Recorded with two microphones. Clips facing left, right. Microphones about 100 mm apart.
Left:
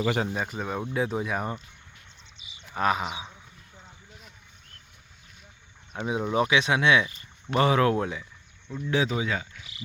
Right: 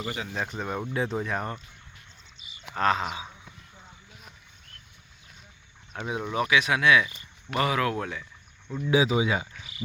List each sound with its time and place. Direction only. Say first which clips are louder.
0.3 s speech: left 1 dB; 5° left (ahead or behind)
2.7 s speech: right 1 dB; 15° left (ahead or behind)
5.9 s speech: left 4 dB; 15° left (ahead or behind)
8.7 s speech: right 3 dB; 10° right (ahead or behind)